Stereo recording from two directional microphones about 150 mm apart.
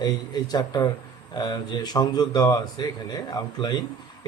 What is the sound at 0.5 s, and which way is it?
A man's voice, 25° left (ahead or behind).